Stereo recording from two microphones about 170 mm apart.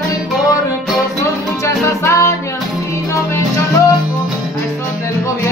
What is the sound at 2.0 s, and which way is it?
Music, 20° left (ahead or behind).